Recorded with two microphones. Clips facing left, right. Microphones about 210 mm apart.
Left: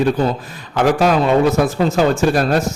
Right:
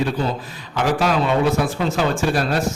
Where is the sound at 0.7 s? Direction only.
45° left (ahead or behind).